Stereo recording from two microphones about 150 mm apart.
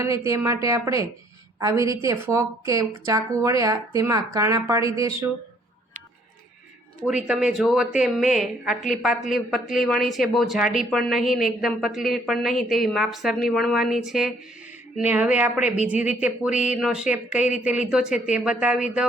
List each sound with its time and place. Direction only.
0.0 s a woman's voice: 20° right (ahead or behind)
7.0 s a woman's voice: 5° right (ahead or behind)